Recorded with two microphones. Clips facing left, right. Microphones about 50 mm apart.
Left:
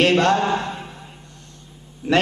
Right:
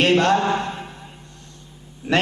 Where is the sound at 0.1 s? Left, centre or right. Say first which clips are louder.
Even; left.